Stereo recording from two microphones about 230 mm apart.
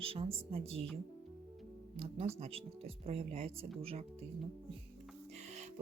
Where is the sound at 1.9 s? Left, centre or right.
Right.